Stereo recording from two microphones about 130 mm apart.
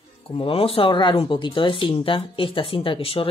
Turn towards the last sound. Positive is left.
turn(degrees=45)  # may be behind; listen again after turning